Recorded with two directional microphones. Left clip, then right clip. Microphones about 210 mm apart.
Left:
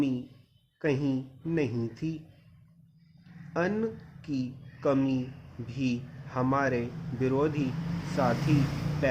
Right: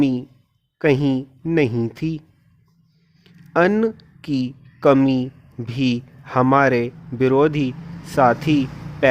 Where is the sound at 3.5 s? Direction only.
45° right (ahead or behind).